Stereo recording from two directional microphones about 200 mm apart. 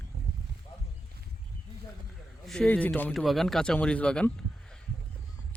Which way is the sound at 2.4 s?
5° left (ahead or behind).